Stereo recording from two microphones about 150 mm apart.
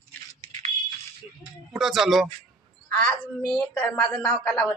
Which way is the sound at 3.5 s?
5° left (ahead or behind).